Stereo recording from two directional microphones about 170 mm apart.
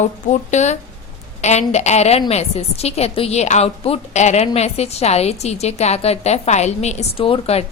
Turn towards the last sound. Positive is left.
turn(degrees=35)  # may be behind; listen again after turning